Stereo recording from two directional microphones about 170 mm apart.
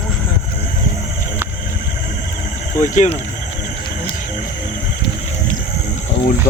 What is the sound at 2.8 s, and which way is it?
Speech, 45° left (ahead or behind).